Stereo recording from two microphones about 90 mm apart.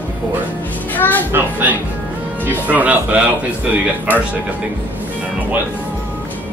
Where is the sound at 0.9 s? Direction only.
20° left (ahead or behind).